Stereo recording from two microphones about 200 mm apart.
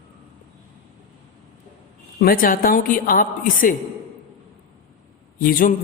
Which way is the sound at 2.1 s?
45° left (ahead or behind).